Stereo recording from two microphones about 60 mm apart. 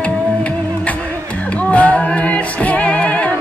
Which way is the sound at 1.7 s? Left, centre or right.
Left.